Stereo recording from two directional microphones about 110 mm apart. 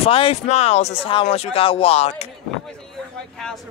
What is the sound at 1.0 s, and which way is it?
Speech, 60° left (ahead or behind).